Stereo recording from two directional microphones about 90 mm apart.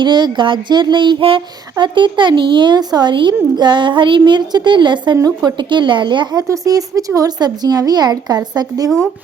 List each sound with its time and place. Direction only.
0.0 s speech: 60° right (ahead or behind); by 1.4 s 75° right (ahead or behind)
1.8 s speech: 60° right (ahead or behind)
6.5 s speech: 40° right (ahead or behind)